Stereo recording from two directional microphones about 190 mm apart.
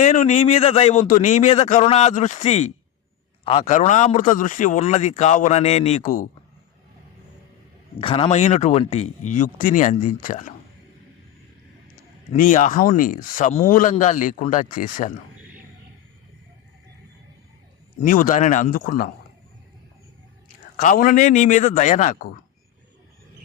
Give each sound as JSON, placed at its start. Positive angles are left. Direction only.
{"t": 0.0, "sound": "a man's voice", "side_deg": 40}
{"t": 7.9, "sound": "a man's voice", "side_deg": 30}
{"t": 12.3, "sound": "a man's voice", "side_deg": 45}
{"t": 18.0, "sound": "speech", "side_deg": 45}
{"t": 20.7, "sound": "a man's voice", "side_deg": 45}